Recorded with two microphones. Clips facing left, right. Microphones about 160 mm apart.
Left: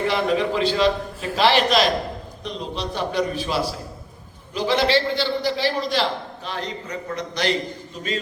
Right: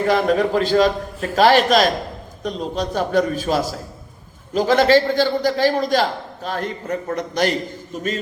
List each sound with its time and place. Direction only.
0.1 s a man's voice: 45° right (ahead or behind)